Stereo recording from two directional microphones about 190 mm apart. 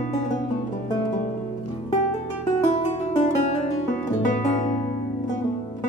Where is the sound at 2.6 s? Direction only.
40° left (ahead or behind).